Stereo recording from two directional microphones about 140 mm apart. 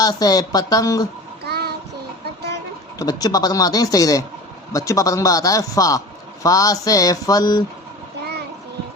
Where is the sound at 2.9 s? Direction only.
25° left (ahead or behind).